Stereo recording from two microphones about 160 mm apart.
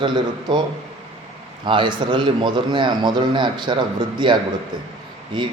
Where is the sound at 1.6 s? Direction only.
30° right (ahead or behind).